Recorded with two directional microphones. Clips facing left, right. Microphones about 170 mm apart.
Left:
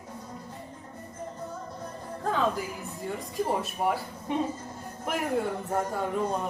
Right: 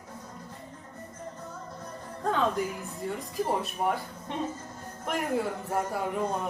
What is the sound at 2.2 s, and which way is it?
A woman's voice, 5° left (ahead or behind).